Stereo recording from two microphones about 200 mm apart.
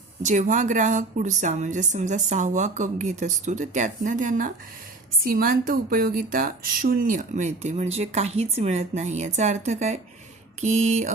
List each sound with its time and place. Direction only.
0.2 s speech: 35° right (ahead or behind)